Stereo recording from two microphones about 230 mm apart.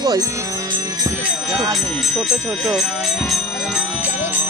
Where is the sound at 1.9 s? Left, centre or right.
Centre.